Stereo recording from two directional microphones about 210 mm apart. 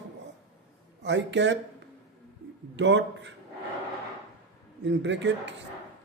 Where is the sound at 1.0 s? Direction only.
60° right (ahead or behind).